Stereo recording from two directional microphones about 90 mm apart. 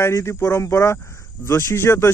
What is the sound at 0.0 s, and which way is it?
Speech, 30° left (ahead or behind).